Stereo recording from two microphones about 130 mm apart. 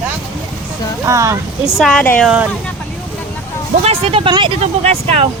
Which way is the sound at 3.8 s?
50° right (ahead or behind).